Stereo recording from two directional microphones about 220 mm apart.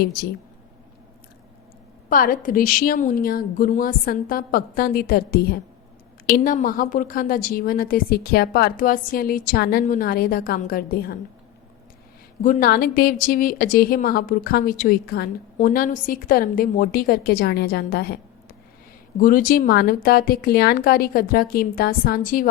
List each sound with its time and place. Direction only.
2.0 s a woman's voice: 40° left (ahead or behind)
12.4 s a woman's voice: 40° left (ahead or behind)